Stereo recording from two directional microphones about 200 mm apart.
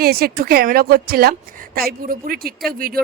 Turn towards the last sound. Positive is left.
turn(degrees=-45)  # may be behind; listen again after turning